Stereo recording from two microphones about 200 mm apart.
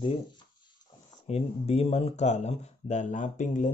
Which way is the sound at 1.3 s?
30° left (ahead or behind).